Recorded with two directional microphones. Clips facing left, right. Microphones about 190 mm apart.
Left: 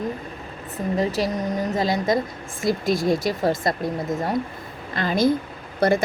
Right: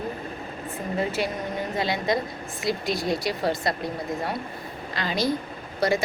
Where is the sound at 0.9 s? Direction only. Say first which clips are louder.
Left 4 dB; 40° left (ahead or behind).